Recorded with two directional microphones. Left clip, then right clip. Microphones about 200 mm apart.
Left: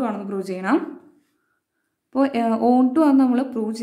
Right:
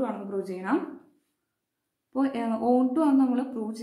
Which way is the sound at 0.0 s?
45° left (ahead or behind).